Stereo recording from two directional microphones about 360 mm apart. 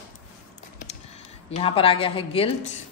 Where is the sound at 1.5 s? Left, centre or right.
Centre.